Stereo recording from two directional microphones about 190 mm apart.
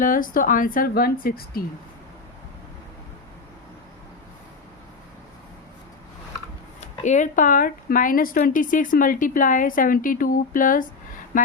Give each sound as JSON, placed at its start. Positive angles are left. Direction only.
{"t": 0.0, "sound": "speech", "side_deg": 45}
{"t": 6.7, "sound": "speech", "side_deg": 40}